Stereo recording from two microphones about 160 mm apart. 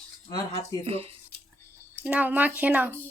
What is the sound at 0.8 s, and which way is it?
Speech, 40° right (ahead or behind).